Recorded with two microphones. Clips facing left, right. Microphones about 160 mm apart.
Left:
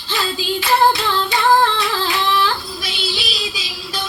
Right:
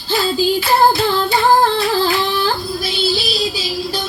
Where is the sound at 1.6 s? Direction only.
35° right (ahead or behind).